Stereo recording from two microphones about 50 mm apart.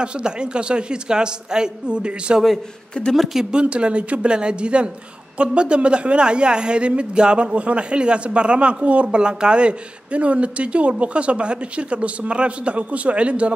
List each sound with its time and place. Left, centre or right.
0.0 s a woman's voice: centre
3.5 s a woman's voice: right